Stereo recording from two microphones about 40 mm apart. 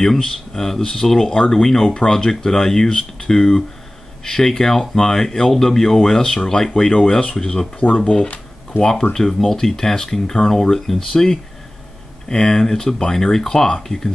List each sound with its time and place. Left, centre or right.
0.0 s speech: centre
7.8 s speech: left
9.1 s speech: centre